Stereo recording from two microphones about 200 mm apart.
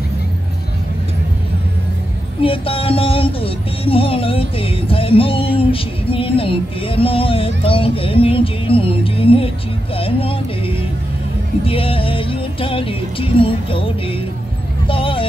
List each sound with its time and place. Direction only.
2.4 s music: 25° left (ahead or behind)
9.9 s speech: 25° left (ahead or behind)
11.6 s music: 25° left (ahead or behind)
14.9 s a sound: 25° left (ahead or behind)